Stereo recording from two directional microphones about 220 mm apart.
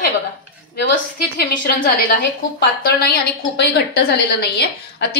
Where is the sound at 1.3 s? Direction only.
45° left (ahead or behind).